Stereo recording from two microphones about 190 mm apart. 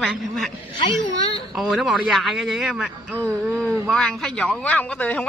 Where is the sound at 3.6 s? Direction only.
5° left (ahead or behind).